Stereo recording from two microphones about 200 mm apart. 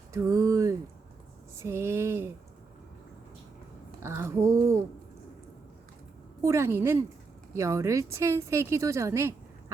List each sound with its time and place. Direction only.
0.1 s a sound: 15° right (ahead or behind)
1.6 s speech: 15° right (ahead or behind)
4.0 s speech: 15° right (ahead or behind)
6.4 s speech: 15° right (ahead or behind)